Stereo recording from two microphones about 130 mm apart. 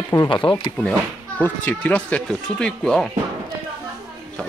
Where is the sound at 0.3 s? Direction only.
40° left (ahead or behind).